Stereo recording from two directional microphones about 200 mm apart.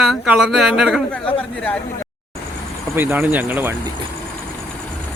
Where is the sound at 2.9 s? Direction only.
10° right (ahead or behind).